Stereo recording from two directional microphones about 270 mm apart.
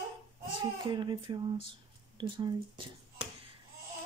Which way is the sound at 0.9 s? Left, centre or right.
Centre.